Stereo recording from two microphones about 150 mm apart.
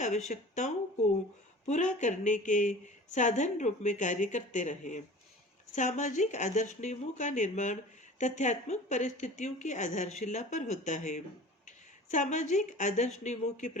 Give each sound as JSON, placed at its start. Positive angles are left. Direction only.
{"t": 0.0, "sound": "a woman's voice", "side_deg": 50}